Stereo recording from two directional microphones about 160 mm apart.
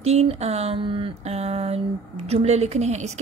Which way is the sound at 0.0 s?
40° right (ahead or behind).